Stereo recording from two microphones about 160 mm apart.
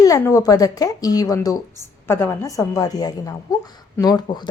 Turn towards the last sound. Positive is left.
turn(degrees=25)  # may be behind; listen again after turning